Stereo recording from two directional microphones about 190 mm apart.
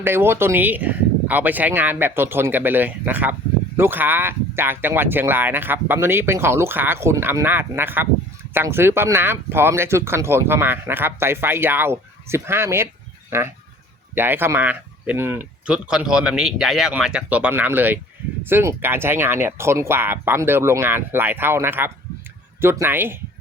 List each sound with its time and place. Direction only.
0.0 s speech: 10° right (ahead or behind)